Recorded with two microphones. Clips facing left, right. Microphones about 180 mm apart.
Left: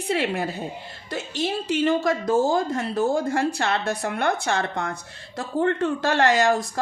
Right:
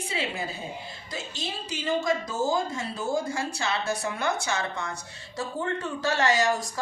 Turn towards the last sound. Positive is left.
turn(degrees=55)  # may be behind; listen again after turning